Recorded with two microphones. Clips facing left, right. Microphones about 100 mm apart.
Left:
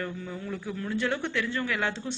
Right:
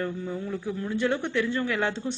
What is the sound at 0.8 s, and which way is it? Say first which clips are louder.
A woman's voice: right 2 dB; 20° right (ahead or behind).